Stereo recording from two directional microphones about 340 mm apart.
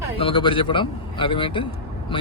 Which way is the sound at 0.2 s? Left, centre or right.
Centre.